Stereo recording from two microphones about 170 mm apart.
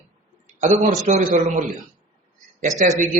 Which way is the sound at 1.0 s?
50° right (ahead or behind).